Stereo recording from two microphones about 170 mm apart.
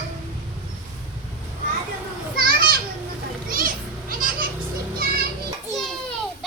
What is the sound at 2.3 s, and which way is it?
Children playing, 60° right (ahead or behind).